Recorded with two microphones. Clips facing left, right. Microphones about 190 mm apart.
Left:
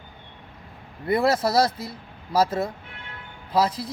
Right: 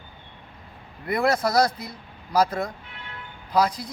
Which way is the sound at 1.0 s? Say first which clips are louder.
Left 2 dB; 30° left (ahead or behind).